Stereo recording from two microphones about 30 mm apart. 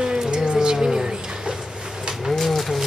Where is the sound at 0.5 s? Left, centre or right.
Right.